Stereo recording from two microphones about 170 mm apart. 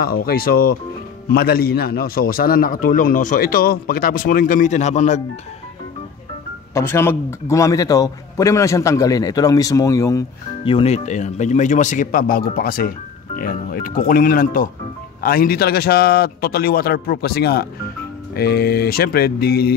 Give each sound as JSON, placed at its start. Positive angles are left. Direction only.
{"t": 0.0, "sound": "a man's voice", "side_deg": 65}
{"t": 6.7, "sound": "a man's voice", "side_deg": 15}
{"t": 10.6, "sound": "a man's voice", "side_deg": 35}